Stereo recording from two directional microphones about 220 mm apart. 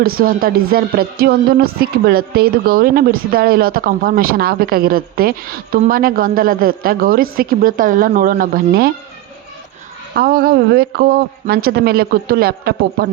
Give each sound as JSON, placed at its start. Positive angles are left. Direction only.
{"t": 0.0, "sound": "a woman's voice", "side_deg": -40}
{"t": 10.2, "sound": "a man's voice", "side_deg": -45}